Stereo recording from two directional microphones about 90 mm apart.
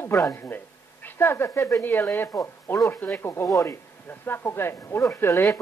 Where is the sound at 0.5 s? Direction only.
20° left (ahead or behind).